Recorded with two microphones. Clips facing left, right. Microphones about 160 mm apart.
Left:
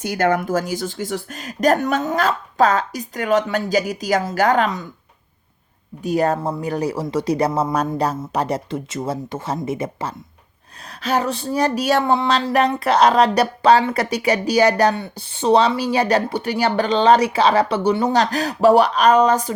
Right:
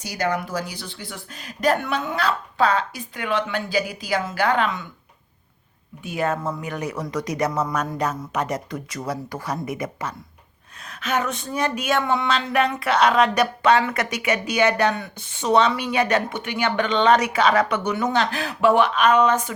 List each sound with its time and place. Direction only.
0.0 s speech: 55° left (ahead or behind)
6.0 s speech: 40° left (ahead or behind)